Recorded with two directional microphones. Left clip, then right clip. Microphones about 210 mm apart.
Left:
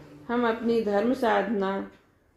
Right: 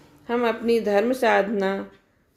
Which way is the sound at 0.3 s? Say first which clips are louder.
Right 4 dB; 35° right (ahead or behind).